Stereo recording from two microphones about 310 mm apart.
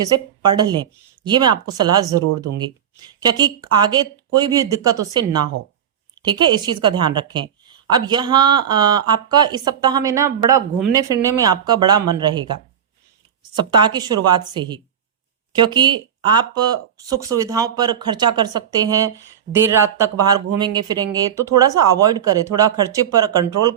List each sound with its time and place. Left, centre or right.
0.0 s a woman's voice: centre
2.5 s speech: right
3.2 s a woman's voice: centre
13.7 s a woman's voice: centre